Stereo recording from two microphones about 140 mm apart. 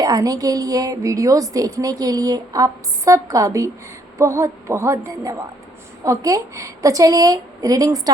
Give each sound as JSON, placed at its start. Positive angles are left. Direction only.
{"t": 0.0, "sound": "a woman's voice", "side_deg": -25}